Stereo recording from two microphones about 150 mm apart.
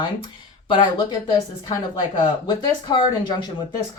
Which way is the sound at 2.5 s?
30° left (ahead or behind).